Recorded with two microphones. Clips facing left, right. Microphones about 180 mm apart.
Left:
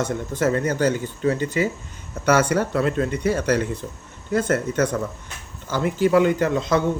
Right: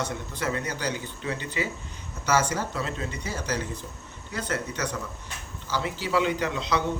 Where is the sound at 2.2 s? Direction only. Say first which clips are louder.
Left 7 dB; 60° left (ahead or behind).